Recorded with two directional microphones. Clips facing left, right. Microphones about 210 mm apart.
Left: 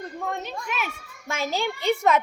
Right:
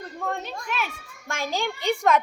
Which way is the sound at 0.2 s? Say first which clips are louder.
Right 1 dB; 10° left (ahead or behind).